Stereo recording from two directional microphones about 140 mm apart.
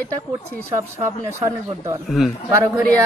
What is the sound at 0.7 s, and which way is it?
Speech, 20° right (ahead or behind).